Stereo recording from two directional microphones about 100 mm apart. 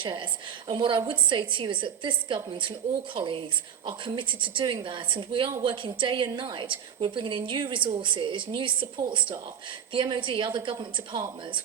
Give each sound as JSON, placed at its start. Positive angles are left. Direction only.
{"t": 0.0, "sound": "a woman's voice", "side_deg": -55}